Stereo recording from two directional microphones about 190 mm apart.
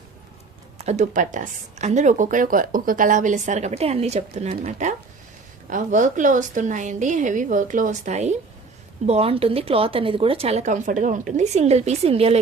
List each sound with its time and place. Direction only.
0.8 s speech: 35° right (ahead or behind)